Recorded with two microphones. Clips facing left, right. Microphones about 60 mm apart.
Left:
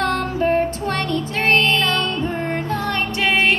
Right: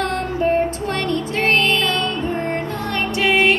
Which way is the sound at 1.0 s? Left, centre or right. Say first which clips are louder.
Right 1 dB; right.